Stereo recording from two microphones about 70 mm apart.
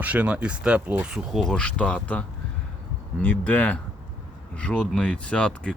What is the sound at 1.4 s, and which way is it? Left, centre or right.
Speech, centre.